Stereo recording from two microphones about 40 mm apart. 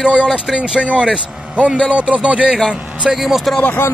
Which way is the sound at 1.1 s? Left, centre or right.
Right.